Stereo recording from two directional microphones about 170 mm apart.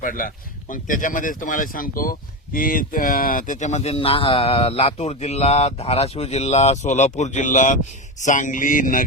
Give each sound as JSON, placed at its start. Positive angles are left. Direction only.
{"t": 0.0, "sound": "speech", "side_deg": 55}